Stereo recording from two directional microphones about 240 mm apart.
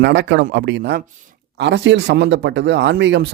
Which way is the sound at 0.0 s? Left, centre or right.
Right.